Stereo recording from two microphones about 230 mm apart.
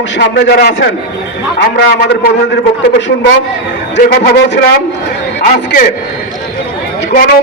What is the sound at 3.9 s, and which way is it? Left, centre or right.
A man's voice, left.